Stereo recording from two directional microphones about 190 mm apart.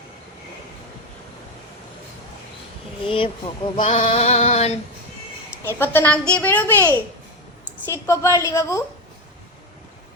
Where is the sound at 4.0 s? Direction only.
35° left (ahead or behind).